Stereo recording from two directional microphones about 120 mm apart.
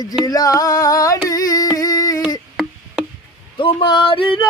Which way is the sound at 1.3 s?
30° left (ahead or behind).